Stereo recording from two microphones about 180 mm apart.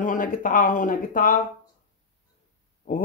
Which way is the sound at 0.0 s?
45° left (ahead or behind).